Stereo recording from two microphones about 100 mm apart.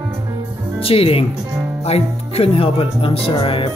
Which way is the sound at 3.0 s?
70° left (ahead or behind).